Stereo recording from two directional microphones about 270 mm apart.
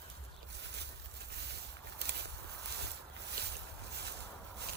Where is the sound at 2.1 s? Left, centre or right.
Right.